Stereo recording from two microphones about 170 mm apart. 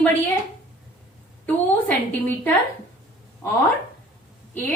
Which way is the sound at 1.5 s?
10° left (ahead or behind).